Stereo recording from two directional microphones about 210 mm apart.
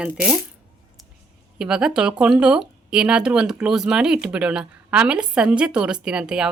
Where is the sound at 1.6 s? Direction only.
5° right (ahead or behind).